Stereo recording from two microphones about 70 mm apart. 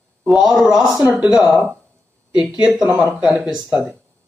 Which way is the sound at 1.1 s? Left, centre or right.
Centre.